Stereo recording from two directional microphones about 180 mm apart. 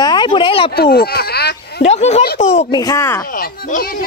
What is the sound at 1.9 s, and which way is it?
Speech, 35° left (ahead or behind).